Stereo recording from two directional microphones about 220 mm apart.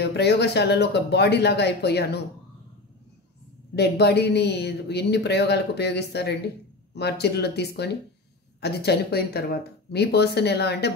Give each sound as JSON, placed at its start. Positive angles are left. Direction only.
{"t": 0.0, "sound": "speech", "side_deg": 50}
{"t": 3.7, "sound": "speech", "side_deg": 50}